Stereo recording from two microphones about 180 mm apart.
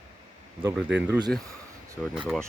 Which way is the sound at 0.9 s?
75° right (ahead or behind).